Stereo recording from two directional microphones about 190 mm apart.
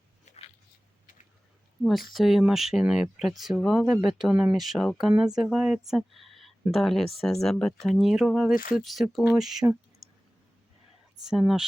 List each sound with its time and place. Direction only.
0.3 s a sound: 35° left (ahead or behind)
1.8 s speech: centre (ahead or behind)
10.0 s clicking: centre (ahead or behind)
11.3 s speech: centre (ahead or behind)